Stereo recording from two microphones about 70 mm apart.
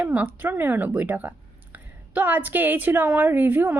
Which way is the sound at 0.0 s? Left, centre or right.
Centre.